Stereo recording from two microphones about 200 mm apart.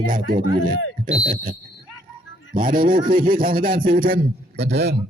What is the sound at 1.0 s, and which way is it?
Speech, 30° right (ahead or behind).